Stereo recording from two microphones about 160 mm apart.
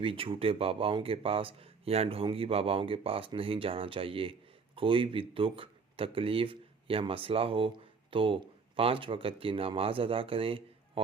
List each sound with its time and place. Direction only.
0.0 s speech: 35° right (ahead or behind)